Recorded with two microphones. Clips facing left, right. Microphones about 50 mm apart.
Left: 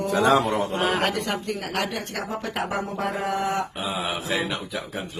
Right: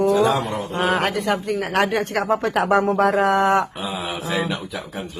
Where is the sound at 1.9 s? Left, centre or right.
Right.